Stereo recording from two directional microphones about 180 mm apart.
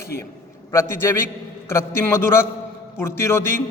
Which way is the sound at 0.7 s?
15° left (ahead or behind).